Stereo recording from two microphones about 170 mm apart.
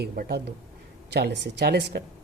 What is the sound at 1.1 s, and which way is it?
Speech, 80° right.